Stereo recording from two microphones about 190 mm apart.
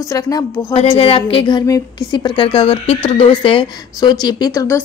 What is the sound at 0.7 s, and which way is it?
A woman's voice, 30° left (ahead or behind).